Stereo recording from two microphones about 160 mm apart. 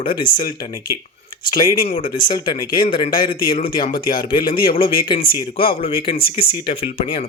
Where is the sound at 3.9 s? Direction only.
65° left (ahead or behind).